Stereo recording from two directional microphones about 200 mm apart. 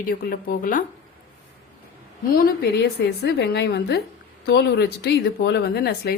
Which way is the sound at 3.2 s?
55° left (ahead or behind).